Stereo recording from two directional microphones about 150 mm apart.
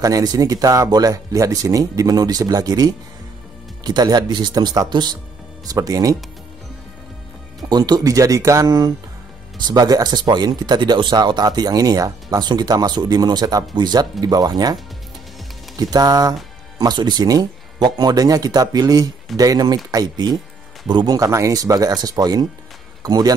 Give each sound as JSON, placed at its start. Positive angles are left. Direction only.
{"t": 0.0, "sound": "speech", "side_deg": -25}
{"t": 7.7, "sound": "speech", "side_deg": -25}